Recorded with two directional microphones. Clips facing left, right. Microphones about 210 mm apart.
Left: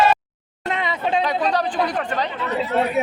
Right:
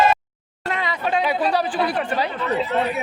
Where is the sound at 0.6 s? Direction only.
20° left (ahead or behind).